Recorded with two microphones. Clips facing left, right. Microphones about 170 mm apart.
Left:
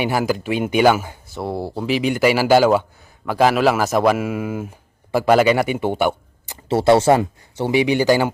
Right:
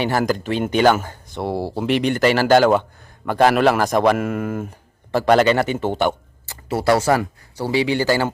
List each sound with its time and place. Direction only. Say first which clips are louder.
0.0 s a man's voice: even; 10° left (ahead or behind)